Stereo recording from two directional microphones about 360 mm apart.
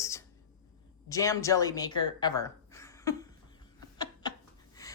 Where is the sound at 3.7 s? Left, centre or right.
Centre.